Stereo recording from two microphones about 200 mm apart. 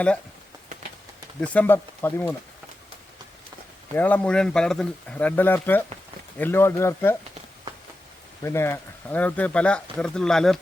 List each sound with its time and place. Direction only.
1.4 s speech: 5° left (ahead or behind)
3.9 s speech: 10° left (ahead or behind)
8.4 s speech: 15° left (ahead or behind)